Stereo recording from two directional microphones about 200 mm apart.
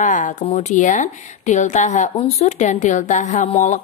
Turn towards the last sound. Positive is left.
turn(degrees=35)  # may be behind; listen again after turning